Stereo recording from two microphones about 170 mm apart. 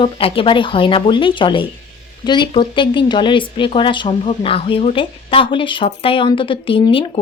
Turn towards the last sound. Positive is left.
turn(degrees=30)  # may be behind; listen again after turning